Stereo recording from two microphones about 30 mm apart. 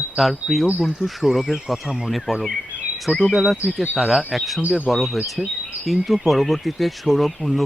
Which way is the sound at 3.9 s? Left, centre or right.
Centre.